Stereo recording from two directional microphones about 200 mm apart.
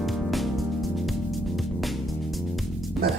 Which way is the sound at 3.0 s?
50° right (ahead or behind).